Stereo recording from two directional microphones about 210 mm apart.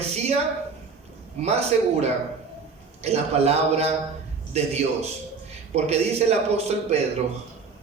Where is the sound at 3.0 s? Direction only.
30° right (ahead or behind).